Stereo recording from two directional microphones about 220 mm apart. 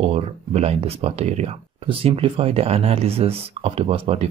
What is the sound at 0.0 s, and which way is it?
Speech, 25° right (ahead or behind).